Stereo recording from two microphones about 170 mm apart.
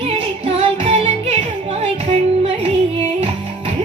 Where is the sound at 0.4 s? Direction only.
35° right (ahead or behind).